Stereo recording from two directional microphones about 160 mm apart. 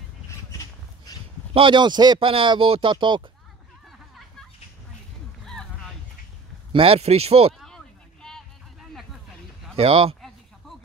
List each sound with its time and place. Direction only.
0.5 s a sound: 20° left (ahead or behind)
1.5 s speech: 30° right (ahead or behind)
5.4 s a sound: centre (ahead or behind)
6.7 s speech: 35° right (ahead or behind)
7.6 s vehicle: 5° left (ahead or behind)
9.8 s speech: 35° right (ahead or behind)